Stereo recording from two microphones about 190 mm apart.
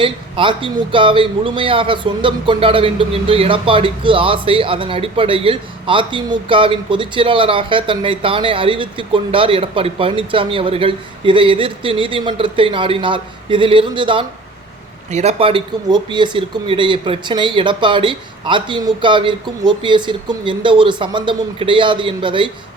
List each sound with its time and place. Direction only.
0.0 s a man's voice: 25° right (ahead or behind)